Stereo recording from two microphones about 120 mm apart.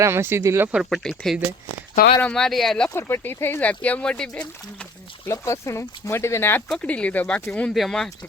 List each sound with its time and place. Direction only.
0.0 s speech: 20° right (ahead or behind)
0.9 s speech: 5° left (ahead or behind)
2.9 s speech: 20° left (ahead or behind)
5.3 s speech: 25° left (ahead or behind)
6.7 s speech: 10° left (ahead or behind)